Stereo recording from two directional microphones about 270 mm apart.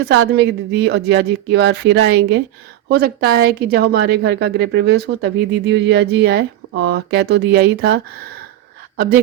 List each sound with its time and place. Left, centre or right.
0.0 s a woman's voice: right